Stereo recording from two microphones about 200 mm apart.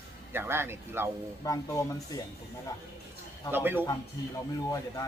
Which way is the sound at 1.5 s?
15° left (ahead or behind).